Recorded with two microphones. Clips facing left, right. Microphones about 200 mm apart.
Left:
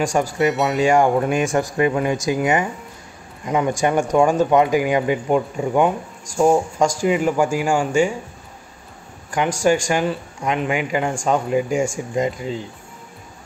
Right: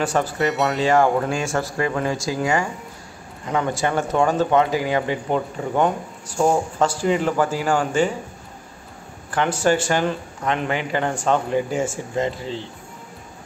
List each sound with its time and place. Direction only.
0.0 s speech: 10° left (ahead or behind)
0.4 s speech: centre (ahead or behind)
0.7 s speech: 15° left (ahead or behind)
9.3 s speech: 10° left (ahead or behind)